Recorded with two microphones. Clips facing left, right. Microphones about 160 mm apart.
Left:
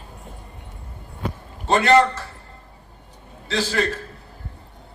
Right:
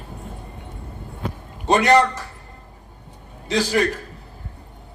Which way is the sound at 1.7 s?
15° right (ahead or behind).